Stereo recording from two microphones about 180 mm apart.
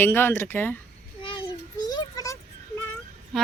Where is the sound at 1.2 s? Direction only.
25° left (ahead or behind).